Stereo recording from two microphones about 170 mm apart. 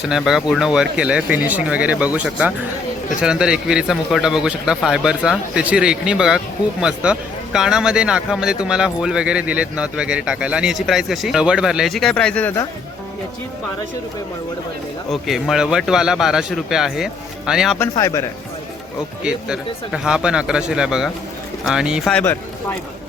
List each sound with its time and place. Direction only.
0.0 s speech: 5° right (ahead or behind)
15.1 s speech: centre (ahead or behind)
17.7 s speech: 20° left (ahead or behind)
19.2 s speech: 5° right (ahead or behind)
22.1 s speech: 10° left (ahead or behind)